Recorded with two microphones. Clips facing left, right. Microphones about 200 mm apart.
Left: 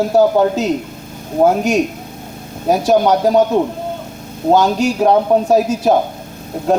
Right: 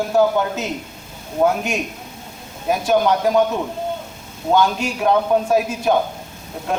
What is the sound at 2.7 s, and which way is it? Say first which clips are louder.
Speech: left 5 dB; 40° left (ahead or behind).